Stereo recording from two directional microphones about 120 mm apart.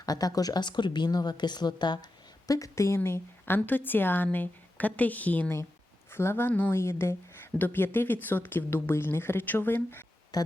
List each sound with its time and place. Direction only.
0.0 s speech: 30° left (ahead or behind)
10.3 s speech: 30° left (ahead or behind)